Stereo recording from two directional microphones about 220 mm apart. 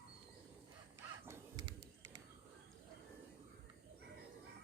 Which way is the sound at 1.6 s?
90° right.